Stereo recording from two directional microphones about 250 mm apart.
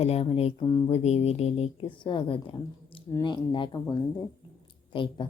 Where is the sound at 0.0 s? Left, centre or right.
Left.